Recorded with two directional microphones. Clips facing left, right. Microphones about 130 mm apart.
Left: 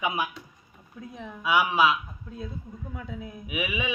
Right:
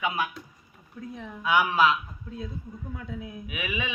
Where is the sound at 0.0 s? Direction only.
15° left (ahead or behind).